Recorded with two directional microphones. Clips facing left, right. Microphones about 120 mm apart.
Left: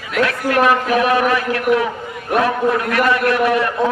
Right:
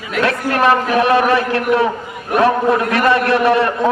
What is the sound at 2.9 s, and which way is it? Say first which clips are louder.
Speech: right 2 dB; 30° right (ahead or behind).